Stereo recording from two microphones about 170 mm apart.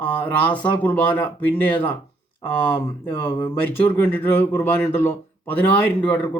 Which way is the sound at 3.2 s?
15° left (ahead or behind).